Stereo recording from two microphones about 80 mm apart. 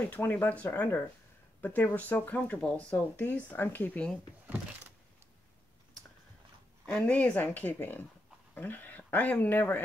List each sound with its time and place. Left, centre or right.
0.1 s speech: left
4.5 s a sound: right
6.9 s speech: centre